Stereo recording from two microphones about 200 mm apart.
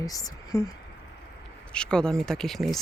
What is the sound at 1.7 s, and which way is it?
Speech, 5° left (ahead or behind).